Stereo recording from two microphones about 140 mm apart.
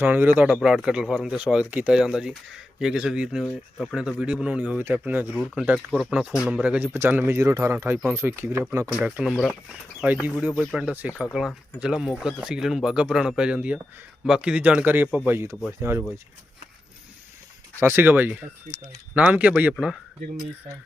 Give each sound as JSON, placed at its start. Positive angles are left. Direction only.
{"t": 0.0, "sound": "speech", "side_deg": -15}
{"t": 9.0, "sound": "speech", "side_deg": -5}
{"t": 9.3, "sound": "speech", "side_deg": 5}
{"t": 10.0, "sound": "speech", "side_deg": -10}
{"t": 17.7, "sound": "speech", "side_deg": -15}
{"t": 18.7, "sound": "speech", "side_deg": -75}
{"t": 19.1, "sound": "speech", "side_deg": -10}